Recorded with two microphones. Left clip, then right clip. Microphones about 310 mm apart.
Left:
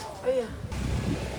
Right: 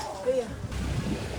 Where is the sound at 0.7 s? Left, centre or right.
Centre.